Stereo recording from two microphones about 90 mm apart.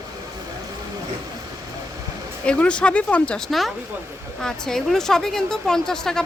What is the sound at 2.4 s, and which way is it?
Speech, 10° left (ahead or behind).